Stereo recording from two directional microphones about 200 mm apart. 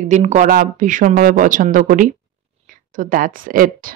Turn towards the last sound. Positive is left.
turn(degrees=-45)  # may be behind; listen again after turning